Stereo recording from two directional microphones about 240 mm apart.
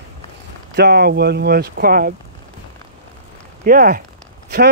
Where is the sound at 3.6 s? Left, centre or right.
Right.